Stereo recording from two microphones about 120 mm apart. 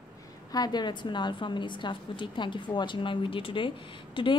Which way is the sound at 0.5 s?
35° left (ahead or behind).